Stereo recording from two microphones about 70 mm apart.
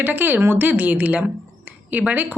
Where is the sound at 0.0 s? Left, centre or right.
Right.